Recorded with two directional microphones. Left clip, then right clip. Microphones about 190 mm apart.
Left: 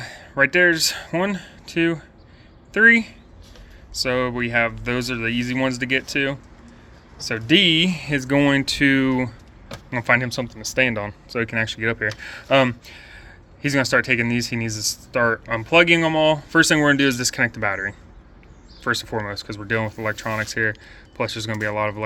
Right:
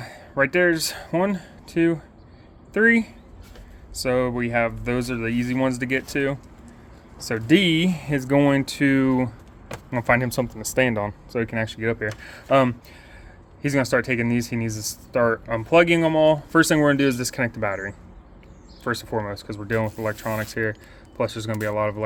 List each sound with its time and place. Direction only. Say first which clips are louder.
0.0 s speech: left 3 dB; 5° right (ahead or behind)
10.2 s speech: right 1 dB; 25° right (ahead or behind)
11.3 s speech: left 3 dB; 5° right (ahead or behind)